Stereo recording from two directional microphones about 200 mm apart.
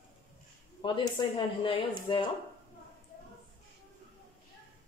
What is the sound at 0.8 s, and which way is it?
Speech, 25° left (ahead or behind).